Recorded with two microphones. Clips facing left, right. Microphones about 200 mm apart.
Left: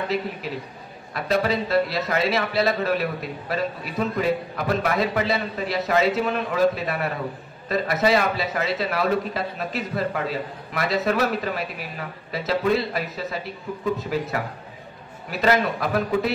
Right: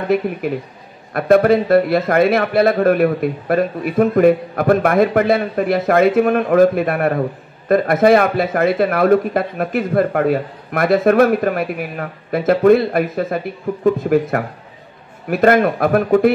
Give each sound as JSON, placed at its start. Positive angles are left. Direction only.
{"t": 0.1, "sound": "a man's voice", "side_deg": -55}